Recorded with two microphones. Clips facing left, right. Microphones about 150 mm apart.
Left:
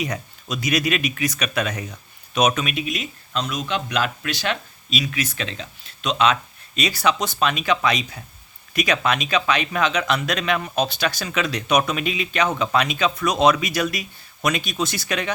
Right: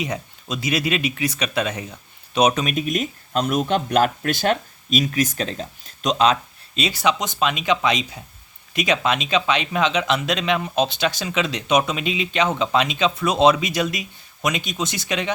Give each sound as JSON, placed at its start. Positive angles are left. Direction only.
{"t": 0.0, "sound": "speech", "side_deg": -25}